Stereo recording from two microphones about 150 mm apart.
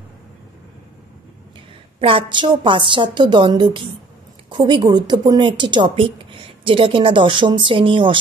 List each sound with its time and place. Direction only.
2.0 s a woman's voice: 35° right (ahead or behind)